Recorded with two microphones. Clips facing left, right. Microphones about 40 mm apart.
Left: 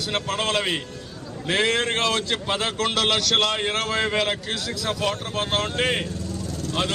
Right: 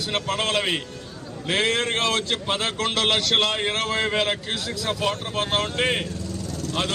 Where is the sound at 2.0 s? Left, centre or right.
Right.